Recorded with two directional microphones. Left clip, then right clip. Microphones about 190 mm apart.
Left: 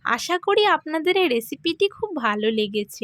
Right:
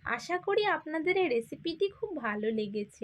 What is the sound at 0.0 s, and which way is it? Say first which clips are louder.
Speech: left 10 dB; 50° left (ahead or behind).